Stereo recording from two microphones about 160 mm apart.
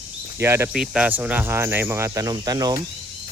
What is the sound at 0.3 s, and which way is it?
Speech, 15° right (ahead or behind).